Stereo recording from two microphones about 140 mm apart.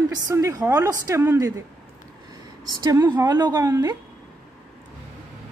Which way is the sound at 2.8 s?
25° right (ahead or behind).